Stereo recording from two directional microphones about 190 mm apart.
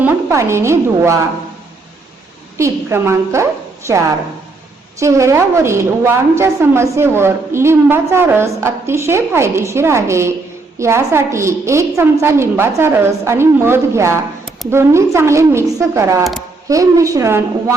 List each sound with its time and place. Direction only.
0.0 s a woman's voice: 10° right (ahead or behind)
2.6 s a woman's voice: 15° right (ahead or behind)